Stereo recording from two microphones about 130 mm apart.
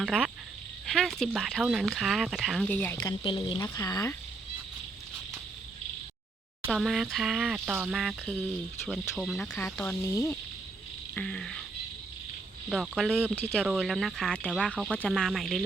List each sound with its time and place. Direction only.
0.0 s speech: 5° right (ahead or behind)
0.9 s frog: centre (ahead or behind)
1.4 s speech: centre (ahead or behind)
2.6 s speech: 15° left (ahead or behind)
3.0 s speech: 35° left (ahead or behind)
3.8 s speech: 30° left (ahead or behind)
6.7 s speech: centre (ahead or behind)
8.2 s speech: 15° left (ahead or behind)
8.9 s speech: centre (ahead or behind)
9.8 s speech: 20° left (ahead or behind)
11.1 s speech: 5° left (ahead or behind)
12.6 s speech: 5° right (ahead or behind)
13.3 s speech: 15° left (ahead or behind)
13.6 s speech: 10° right (ahead or behind)